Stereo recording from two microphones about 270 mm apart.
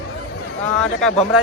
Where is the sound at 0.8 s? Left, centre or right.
Centre.